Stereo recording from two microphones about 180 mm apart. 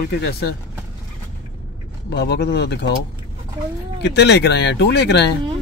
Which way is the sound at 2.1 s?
65° left (ahead or behind).